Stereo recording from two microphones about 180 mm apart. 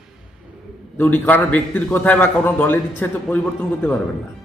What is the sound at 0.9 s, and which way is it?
A man's voice, 10° left (ahead or behind).